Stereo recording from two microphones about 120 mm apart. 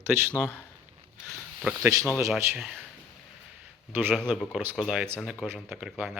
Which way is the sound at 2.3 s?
Centre (ahead or behind).